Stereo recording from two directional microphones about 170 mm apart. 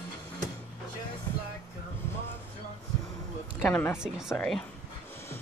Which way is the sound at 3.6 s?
10° left (ahead or behind).